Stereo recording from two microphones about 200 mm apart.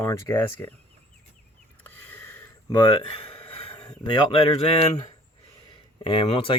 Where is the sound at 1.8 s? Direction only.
10° left (ahead or behind).